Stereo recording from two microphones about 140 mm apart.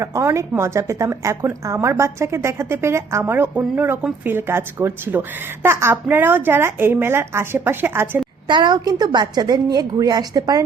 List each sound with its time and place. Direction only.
0.0 s a woman's voice: 20° right (ahead or behind)
8.4 s a woman's voice: 30° right (ahead or behind)